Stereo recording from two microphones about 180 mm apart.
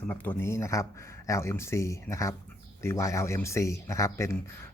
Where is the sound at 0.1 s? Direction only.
10° left (ahead or behind).